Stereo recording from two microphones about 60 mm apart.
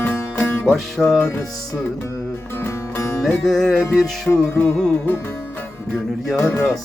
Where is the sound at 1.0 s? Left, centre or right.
Centre.